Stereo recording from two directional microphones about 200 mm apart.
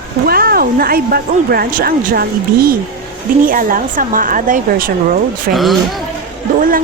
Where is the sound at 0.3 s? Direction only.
50° right (ahead or behind).